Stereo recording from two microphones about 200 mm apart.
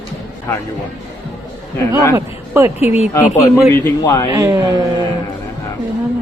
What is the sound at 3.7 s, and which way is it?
Speech, 15° left (ahead or behind).